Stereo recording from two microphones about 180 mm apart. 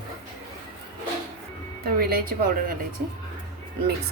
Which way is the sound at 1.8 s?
60° right (ahead or behind).